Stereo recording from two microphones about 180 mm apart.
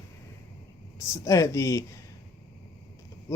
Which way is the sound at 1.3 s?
15° left (ahead or behind).